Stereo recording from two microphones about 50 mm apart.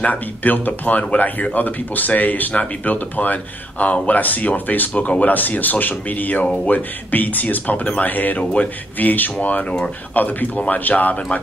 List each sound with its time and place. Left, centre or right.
0.0 s speech: left
10.1 s speech: left